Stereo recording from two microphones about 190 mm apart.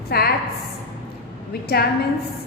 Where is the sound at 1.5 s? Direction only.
55° left (ahead or behind).